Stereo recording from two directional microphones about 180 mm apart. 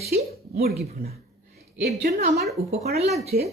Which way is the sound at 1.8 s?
45° right (ahead or behind).